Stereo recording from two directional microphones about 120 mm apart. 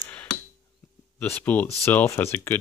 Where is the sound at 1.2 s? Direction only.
15° left (ahead or behind).